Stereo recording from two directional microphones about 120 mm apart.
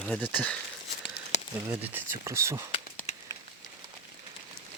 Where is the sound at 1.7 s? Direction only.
15° right (ahead or behind).